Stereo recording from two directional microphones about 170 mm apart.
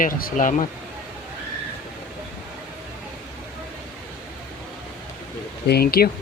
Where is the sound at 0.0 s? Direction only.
55° left (ahead or behind).